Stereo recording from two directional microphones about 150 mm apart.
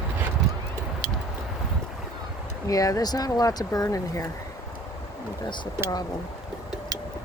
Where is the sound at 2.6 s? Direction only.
25° left (ahead or behind).